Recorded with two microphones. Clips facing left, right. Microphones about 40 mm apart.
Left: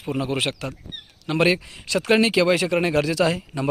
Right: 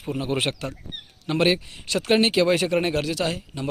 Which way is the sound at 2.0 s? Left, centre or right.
Left.